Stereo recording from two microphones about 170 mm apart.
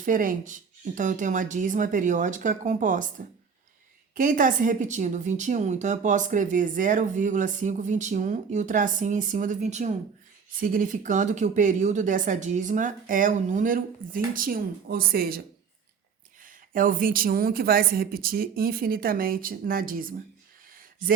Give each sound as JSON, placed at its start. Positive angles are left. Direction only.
{"t": 0.0, "sound": "a woman's voice", "side_deg": -50}
{"t": 4.1, "sound": "a woman's voice", "side_deg": -50}
{"t": 10.6, "sound": "a woman's voice", "side_deg": -55}